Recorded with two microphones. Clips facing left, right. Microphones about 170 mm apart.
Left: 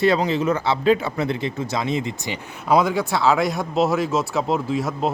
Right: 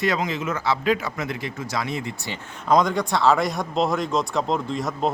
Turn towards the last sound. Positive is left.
turn(degrees=5)  # may be behind; listen again after turning